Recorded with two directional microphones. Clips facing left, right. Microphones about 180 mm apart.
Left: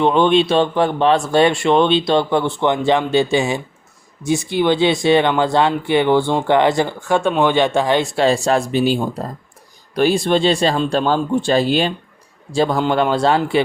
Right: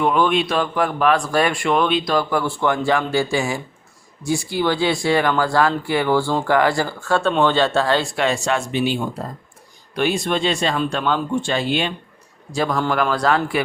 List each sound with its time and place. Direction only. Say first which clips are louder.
0.0 s speech: left 4 dB; 25° left (ahead or behind)
8.1 s speech: left 5 dB; 30° left (ahead or behind)